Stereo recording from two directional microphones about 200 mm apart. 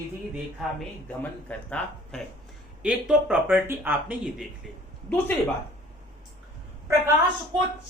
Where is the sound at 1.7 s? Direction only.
5° left (ahead or behind).